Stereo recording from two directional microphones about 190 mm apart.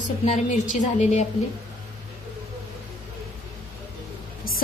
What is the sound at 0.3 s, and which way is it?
Speech, 40° left (ahead or behind).